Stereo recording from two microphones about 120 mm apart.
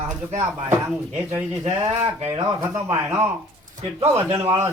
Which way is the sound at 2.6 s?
25° right (ahead or behind).